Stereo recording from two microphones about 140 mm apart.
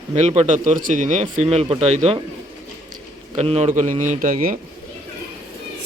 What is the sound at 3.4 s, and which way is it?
Speech, 50° right (ahead or behind).